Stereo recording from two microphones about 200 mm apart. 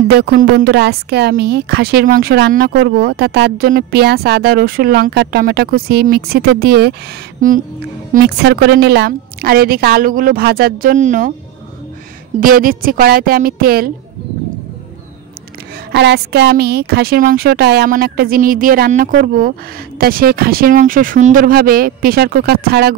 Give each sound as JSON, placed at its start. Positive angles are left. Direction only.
{"t": 0.1, "sound": "a woman's voice", "side_deg": -50}
{"t": 8.1, "sound": "a woman's voice", "side_deg": -55}
{"t": 12.4, "sound": "a woman's voice", "side_deg": -45}
{"t": 15.9, "sound": "a woman's voice", "side_deg": -55}